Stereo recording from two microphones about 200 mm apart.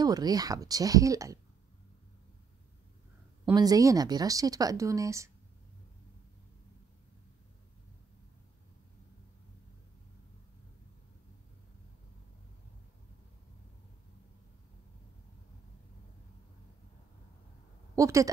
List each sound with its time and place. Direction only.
0.0 s speech: 20° right (ahead or behind)
3.5 s speech: 20° right (ahead or behind)
17.9 s speech: 15° right (ahead or behind)